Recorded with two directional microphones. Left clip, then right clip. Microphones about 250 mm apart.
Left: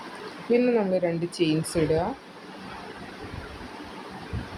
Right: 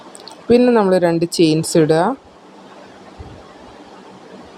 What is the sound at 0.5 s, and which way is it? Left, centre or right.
Speech, right.